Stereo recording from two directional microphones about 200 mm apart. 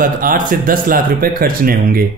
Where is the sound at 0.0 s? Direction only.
45° right (ahead or behind).